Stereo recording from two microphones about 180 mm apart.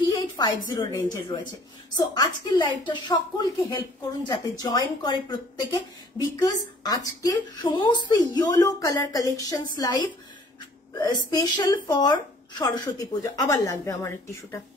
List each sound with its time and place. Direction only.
0.1 s a woman's voice: 20° left (ahead or behind)
6.4 s a woman's voice: 20° left (ahead or behind)